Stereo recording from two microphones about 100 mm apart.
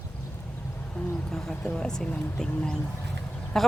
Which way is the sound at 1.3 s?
5° left (ahead or behind).